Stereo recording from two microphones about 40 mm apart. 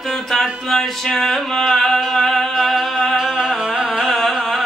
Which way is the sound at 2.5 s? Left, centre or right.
Centre.